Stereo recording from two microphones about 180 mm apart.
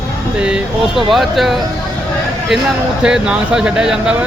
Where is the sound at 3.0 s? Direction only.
5° right (ahead or behind).